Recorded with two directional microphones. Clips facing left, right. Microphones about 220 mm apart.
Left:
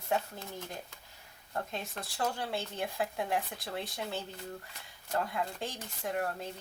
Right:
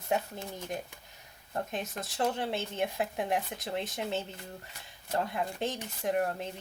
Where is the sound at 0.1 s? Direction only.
15° right (ahead or behind).